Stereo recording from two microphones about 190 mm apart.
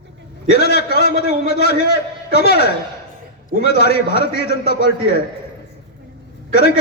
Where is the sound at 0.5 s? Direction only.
60° left (ahead or behind).